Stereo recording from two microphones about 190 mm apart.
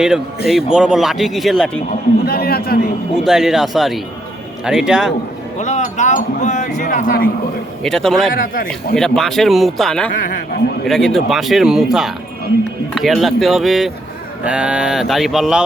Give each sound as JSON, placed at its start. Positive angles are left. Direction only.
{"t": 0.4, "sound": "speech", "side_deg": 0}
{"t": 1.9, "sound": "a man's voice", "side_deg": 55}
{"t": 3.2, "sound": "speech", "side_deg": 0}
{"t": 5.5, "sound": "speech", "side_deg": 40}
{"t": 7.9, "sound": "speech", "side_deg": 0}
{"t": 8.3, "sound": "a man's voice", "side_deg": 45}
{"t": 9.0, "sound": "speech", "side_deg": 0}